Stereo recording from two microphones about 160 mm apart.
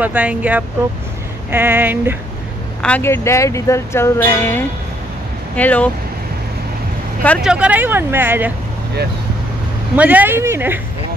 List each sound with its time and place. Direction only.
0.0 s speech: 10° right (ahead or behind)
2.8 s speech: 10° left (ahead or behind)
7.4 s speech: 10° right (ahead or behind)
9.9 s speech: 10° right (ahead or behind)